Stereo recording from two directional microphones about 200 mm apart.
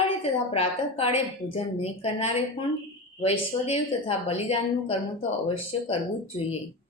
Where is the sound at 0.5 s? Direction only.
30° left (ahead or behind).